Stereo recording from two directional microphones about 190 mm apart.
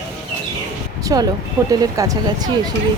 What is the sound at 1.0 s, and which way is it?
A woman's voice, 20° right (ahead or behind).